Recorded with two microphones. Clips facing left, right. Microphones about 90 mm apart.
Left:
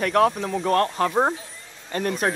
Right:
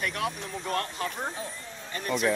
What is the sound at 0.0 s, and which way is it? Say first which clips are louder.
Speech: left 12 dB; 70° left (ahead or behind).